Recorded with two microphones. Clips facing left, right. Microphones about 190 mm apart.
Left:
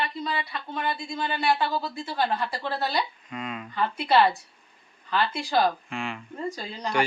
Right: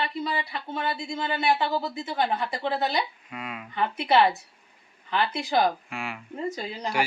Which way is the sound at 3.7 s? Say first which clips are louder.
Even; 20° right (ahead or behind).